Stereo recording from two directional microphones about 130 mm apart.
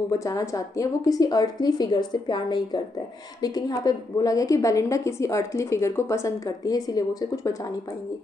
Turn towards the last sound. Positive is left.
turn(degrees=30)  # may be behind; listen again after turning